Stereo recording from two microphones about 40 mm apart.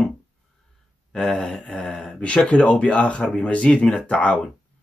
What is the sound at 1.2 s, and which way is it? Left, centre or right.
Mantra, centre.